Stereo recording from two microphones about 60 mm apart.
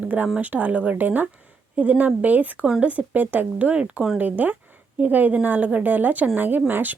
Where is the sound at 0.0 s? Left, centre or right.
Right.